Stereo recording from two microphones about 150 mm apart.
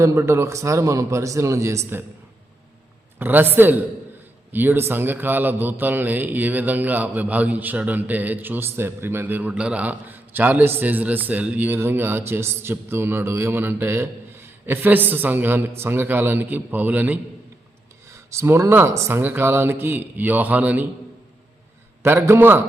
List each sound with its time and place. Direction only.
0.0 s speech: 20° right (ahead or behind)
3.2 s a man's voice: 15° right (ahead or behind)
22.0 s a man's voice: 15° right (ahead or behind)